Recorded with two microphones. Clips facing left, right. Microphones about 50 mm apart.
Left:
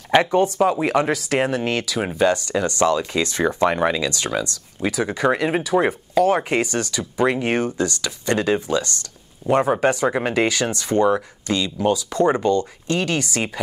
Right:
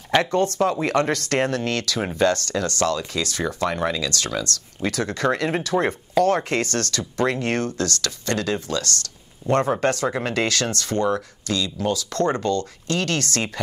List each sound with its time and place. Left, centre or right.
0.1 s speech: centre